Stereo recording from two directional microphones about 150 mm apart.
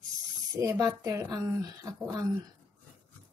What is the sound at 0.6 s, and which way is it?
Speech, 20° right (ahead or behind).